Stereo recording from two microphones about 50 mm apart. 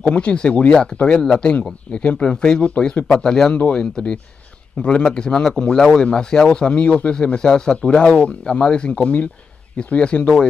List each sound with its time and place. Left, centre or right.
0.0 s speech: left